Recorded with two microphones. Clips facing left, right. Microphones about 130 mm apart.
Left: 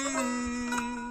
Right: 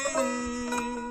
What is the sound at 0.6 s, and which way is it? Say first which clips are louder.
Music: right 2 dB; 45° right (ahead or behind).